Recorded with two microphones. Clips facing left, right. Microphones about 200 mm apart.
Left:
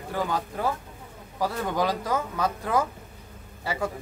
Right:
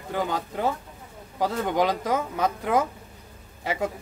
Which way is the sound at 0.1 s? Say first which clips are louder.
Right 1 dB; 20° right (ahead or behind).